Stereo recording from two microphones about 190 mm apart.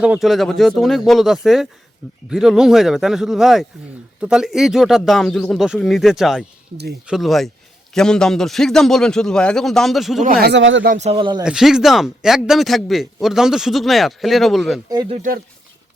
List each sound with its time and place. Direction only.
0.0 s speech: 5° right (ahead or behind)
10.4 s speech: 75° right (ahead or behind)
10.8 s a man's voice: 40° right (ahead or behind)
11.4 s speech: 5° right (ahead or behind)
15.1 s speech: 45° right (ahead or behind)